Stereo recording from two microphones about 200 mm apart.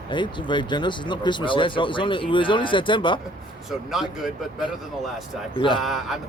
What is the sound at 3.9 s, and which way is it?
Speech, centre (ahead or behind).